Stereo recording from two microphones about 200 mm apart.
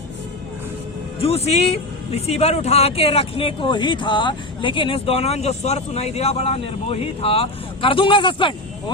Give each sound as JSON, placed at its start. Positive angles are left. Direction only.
{"t": 1.2, "sound": "speech", "side_deg": 30}